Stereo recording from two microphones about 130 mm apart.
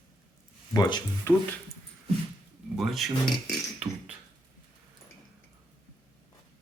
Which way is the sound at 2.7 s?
Centre (ahead or behind).